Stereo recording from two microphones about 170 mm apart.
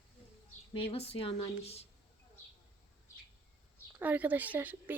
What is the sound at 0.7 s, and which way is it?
Speech, 35° left (ahead or behind).